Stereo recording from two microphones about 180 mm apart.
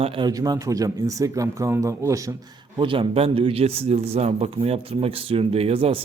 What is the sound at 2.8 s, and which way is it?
A man's voice, 30° right (ahead or behind).